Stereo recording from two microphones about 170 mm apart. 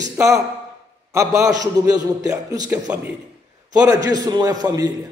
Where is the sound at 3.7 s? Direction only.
20° right (ahead or behind).